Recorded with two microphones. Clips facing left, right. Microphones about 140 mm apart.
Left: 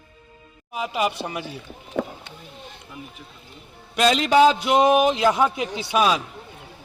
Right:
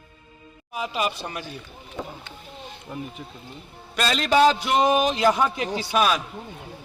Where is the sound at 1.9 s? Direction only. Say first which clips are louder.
Left 8 dB; 65° left (ahead or behind).